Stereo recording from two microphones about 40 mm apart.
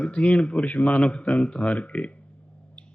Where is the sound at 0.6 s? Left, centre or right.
Left.